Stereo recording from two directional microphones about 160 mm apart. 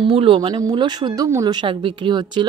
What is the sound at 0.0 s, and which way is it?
A woman's voice, 35° right (ahead or behind).